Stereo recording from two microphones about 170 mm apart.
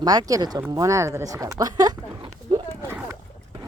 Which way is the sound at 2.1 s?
25° right (ahead or behind).